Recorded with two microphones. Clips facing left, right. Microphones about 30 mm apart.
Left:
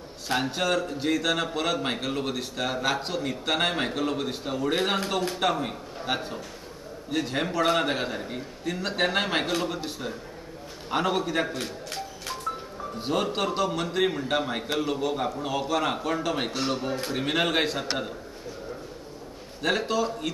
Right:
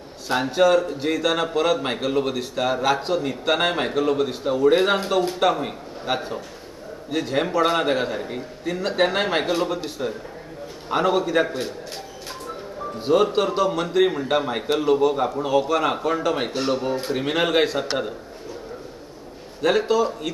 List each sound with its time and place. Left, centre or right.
0.3 s a man's voice: centre
11.4 s a man's voice: centre
13.0 s a man's voice: centre
19.6 s speech: centre